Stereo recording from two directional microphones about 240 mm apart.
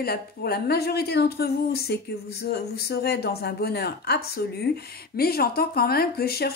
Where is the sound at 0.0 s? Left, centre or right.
Left.